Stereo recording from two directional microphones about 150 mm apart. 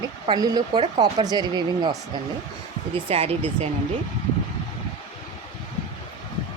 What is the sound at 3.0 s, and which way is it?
Speech, 40° right (ahead or behind).